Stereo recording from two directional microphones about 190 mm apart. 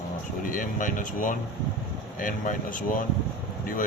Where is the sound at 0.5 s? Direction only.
45° left (ahead or behind).